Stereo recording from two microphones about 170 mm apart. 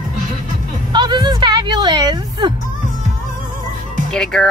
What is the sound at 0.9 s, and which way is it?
Speech, 25° right (ahead or behind).